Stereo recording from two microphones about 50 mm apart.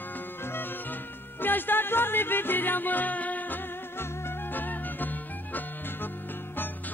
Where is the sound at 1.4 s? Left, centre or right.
Left.